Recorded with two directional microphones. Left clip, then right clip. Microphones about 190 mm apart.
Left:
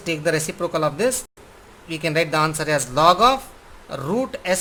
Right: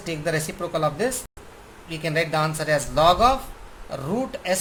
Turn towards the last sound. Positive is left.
turn(degrees=40)  # may be behind; listen again after turning